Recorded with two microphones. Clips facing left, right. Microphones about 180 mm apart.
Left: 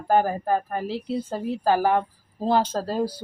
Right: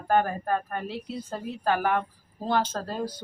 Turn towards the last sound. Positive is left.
turn(degrees=35)  # may be behind; listen again after turning